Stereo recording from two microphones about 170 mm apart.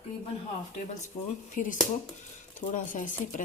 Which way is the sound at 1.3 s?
50° left (ahead or behind).